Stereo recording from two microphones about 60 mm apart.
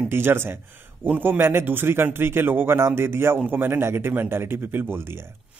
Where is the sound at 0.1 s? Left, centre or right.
Right.